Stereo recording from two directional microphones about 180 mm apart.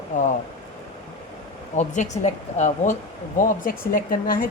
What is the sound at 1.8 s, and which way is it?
A woman's voice, 40° left (ahead or behind).